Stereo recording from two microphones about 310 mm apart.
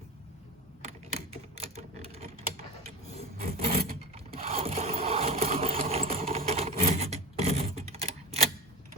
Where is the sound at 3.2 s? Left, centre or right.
Centre.